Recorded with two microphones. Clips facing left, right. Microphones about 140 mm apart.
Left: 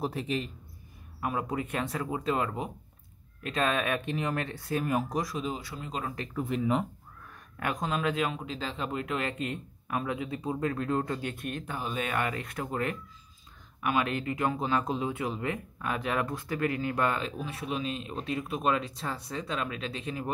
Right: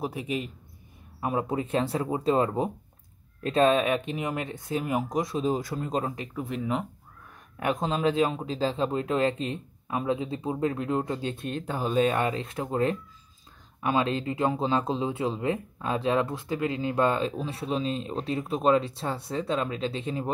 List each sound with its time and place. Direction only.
0.0 s speech: 10° right (ahead or behind)
1.2 s speech: 25° right (ahead or behind)
5.5 s speech: 45° right (ahead or behind)
6.0 s speech: 20° right (ahead or behind)
6.3 s speech: centre (ahead or behind)
7.5 s speech: 25° right (ahead or behind)